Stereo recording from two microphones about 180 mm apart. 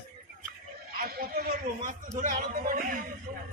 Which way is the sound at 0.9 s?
55° right (ahead or behind).